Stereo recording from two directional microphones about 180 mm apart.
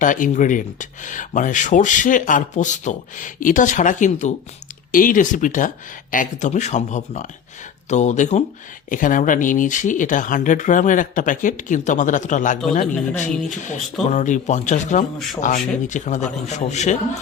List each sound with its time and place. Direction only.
0.0 s a man's voice: 45° left (ahead or behind)